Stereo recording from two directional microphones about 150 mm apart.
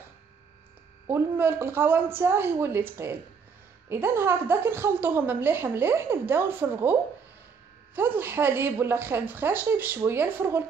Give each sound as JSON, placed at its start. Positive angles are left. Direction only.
{"t": 1.0, "sound": "a woman's voice", "side_deg": -15}